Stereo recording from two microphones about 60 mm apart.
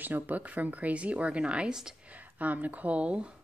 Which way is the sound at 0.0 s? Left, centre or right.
Right.